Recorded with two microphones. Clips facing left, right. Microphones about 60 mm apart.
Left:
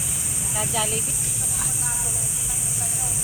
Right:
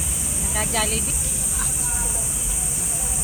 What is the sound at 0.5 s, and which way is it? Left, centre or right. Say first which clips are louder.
Speech: right 2 dB; right.